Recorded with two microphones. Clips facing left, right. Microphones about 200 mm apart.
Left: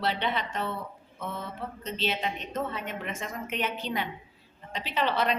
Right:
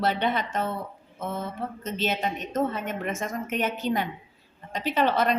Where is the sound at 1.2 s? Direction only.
45° right (ahead or behind).